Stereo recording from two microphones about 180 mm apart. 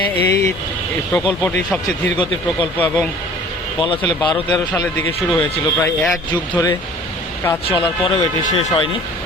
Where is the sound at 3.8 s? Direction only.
30° left (ahead or behind).